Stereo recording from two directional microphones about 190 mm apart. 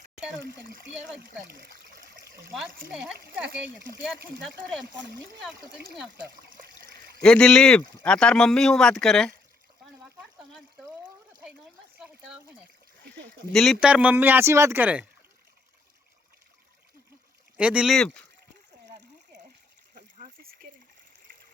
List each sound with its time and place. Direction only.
0.4 s a child's voice: 55° right (ahead or behind)
1.5 s trickle: 55° right (ahead or behind)
2.9 s speech: 5° right (ahead or behind)
7.2 s speech: 5° left (ahead or behind)
10.0 s a sound: centre (ahead or behind)
13.5 s speech: centre (ahead or behind)
17.6 s speech: 5° right (ahead or behind)
19.9 s a sound: 40° right (ahead or behind)